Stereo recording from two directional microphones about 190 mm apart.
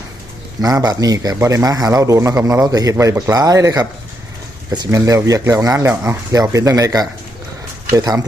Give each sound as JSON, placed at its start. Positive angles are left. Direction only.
{"t": 0.6, "sound": "speech", "side_deg": -20}